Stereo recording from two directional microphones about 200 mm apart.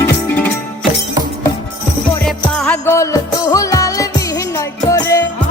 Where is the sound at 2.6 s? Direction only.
10° left (ahead or behind).